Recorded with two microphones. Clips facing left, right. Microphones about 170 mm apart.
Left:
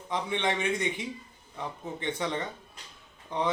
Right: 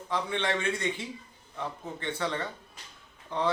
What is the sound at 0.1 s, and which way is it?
Speech, 20° left (ahead or behind).